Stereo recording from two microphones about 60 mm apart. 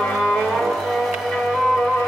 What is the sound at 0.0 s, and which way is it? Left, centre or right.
Music, centre.